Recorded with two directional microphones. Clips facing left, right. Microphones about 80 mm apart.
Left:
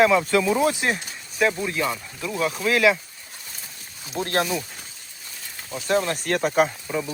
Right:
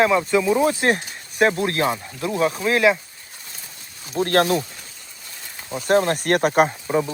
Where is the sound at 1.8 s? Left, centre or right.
Right.